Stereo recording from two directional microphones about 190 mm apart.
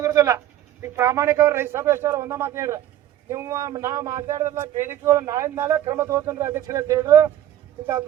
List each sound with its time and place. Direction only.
0.0 s a sound: 15° right (ahead or behind)
0.9 s a man's voice: 15° right (ahead or behind)
4.4 s speech: 35° right (ahead or behind)
4.9 s a man's voice: 20° right (ahead or behind)